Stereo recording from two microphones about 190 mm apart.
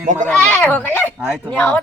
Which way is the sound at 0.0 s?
40° right (ahead or behind).